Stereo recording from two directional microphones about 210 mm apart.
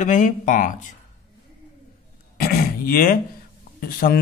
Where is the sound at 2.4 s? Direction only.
45° left (ahead or behind).